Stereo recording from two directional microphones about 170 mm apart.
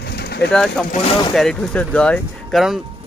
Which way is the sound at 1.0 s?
30° left (ahead or behind).